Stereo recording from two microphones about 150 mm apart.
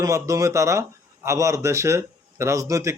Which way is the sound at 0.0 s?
20° right (ahead or behind).